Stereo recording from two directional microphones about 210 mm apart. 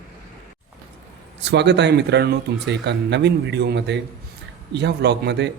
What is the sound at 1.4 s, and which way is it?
A man's voice, 55° right (ahead or behind).